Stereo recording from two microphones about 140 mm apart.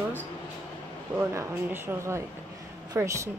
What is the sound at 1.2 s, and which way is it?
A woman's voice, 15° right (ahead or behind).